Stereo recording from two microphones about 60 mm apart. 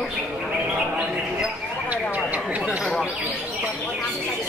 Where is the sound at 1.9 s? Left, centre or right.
Right.